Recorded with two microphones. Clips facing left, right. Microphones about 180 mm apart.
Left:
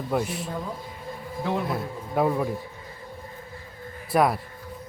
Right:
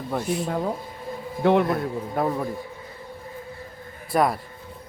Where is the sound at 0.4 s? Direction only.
70° right (ahead or behind).